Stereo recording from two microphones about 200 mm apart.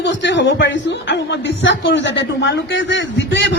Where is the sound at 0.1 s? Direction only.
65° left (ahead or behind).